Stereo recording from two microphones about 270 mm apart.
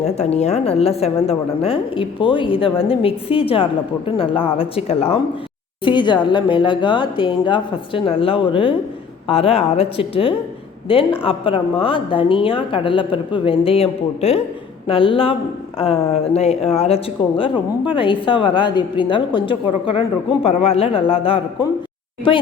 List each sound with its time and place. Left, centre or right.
0.0 s a woman's voice: left